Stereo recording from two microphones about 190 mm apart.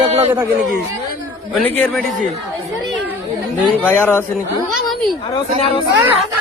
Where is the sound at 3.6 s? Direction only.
10° left (ahead or behind).